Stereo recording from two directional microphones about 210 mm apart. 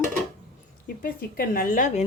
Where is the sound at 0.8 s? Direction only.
45° left (ahead or behind).